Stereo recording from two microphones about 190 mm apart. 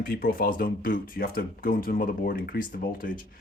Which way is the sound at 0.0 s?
50° left (ahead or behind).